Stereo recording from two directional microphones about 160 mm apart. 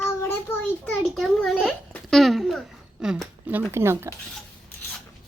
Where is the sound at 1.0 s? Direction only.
Centre (ahead or behind).